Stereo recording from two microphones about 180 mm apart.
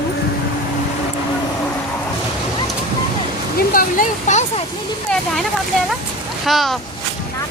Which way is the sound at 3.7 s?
50° left (ahead or behind).